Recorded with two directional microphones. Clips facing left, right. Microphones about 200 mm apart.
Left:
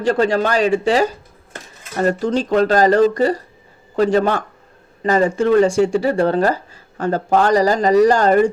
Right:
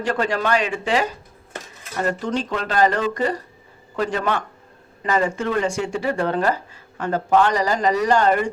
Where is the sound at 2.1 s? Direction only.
35° left (ahead or behind).